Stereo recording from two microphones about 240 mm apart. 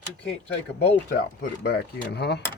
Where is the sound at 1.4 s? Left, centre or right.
Left.